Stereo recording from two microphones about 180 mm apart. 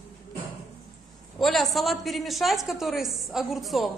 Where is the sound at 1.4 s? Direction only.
Centre (ahead or behind).